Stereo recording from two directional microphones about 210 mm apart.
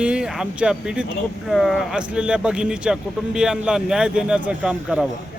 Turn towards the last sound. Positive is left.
turn(degrees=-5)  # may be behind; listen again after turning